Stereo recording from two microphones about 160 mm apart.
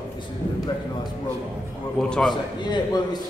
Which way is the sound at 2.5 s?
25° left (ahead or behind).